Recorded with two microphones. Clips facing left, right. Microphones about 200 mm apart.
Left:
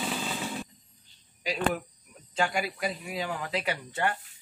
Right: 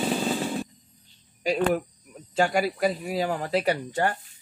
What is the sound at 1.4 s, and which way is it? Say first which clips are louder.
Cricket: right 6 dB; 45° right (ahead or behind).